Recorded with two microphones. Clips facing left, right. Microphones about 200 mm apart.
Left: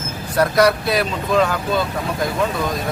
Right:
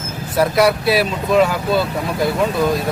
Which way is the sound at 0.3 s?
5° right (ahead or behind).